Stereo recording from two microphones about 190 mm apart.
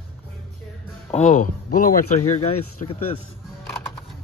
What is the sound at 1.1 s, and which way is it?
Speech, 40° left (ahead or behind).